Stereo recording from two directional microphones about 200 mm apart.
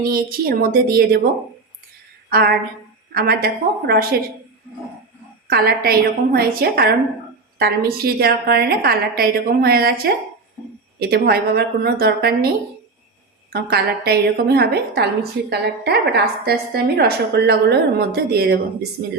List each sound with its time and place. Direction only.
0.1 s a woman's voice: 45° right (ahead or behind)
2.3 s a woman's voice: 50° right (ahead or behind)
5.5 s a woman's voice: 50° right (ahead or behind)
13.5 s a woman's voice: 50° right (ahead or behind)